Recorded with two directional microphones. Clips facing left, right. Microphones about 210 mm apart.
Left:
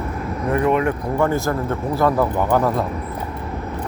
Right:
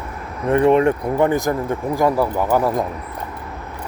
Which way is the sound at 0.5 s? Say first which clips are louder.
Right 5 dB; 25° right (ahead or behind).